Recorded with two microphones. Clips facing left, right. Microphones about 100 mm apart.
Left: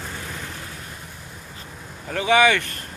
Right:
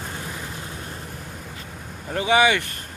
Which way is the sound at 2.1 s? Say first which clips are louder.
Left 1 dB; 25° right (ahead or behind).